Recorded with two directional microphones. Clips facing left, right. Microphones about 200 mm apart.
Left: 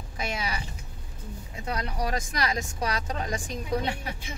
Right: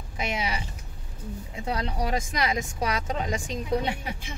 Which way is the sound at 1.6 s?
25° right (ahead or behind).